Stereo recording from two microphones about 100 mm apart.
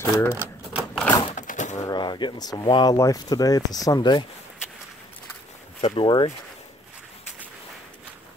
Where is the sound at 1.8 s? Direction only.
45° left (ahead or behind).